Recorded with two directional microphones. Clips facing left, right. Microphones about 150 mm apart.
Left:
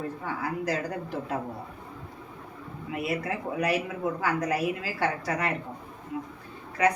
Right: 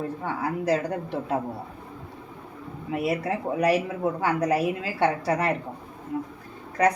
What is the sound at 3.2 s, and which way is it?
A woman's voice, 35° right (ahead or behind).